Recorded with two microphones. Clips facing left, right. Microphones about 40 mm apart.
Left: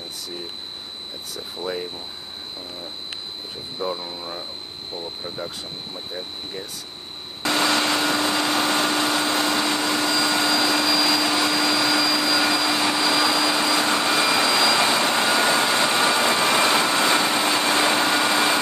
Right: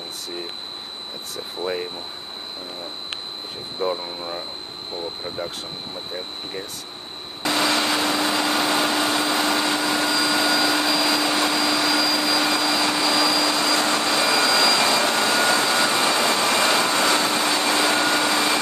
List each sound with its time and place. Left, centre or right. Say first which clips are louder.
1.6 s speech: right 2 dB; right
3.8 s speech: right 3 dB; right
7.4 s vacuum cleaner: even; centre